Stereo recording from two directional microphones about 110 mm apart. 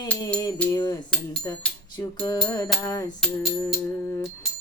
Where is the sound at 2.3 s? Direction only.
35° left (ahead or behind).